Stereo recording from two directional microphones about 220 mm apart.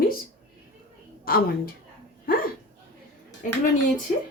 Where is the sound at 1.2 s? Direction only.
45° left (ahead or behind).